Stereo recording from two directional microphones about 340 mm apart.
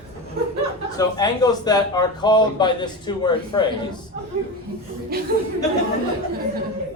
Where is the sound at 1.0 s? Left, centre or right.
Centre.